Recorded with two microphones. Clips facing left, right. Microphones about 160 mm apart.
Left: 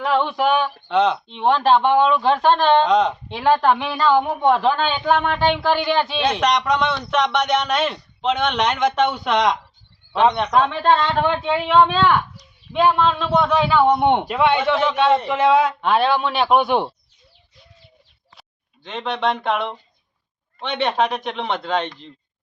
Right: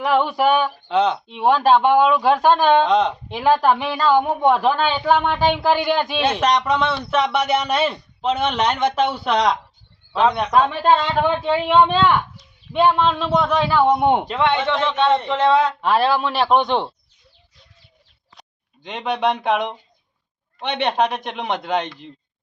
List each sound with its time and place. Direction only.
0.0 s a woman's voice: 5° right (ahead or behind)
2.9 s a man's voice: centre (ahead or behind)
14.3 s a man's voice: 10° left (ahead or behind)
18.8 s a woman's voice: 15° right (ahead or behind)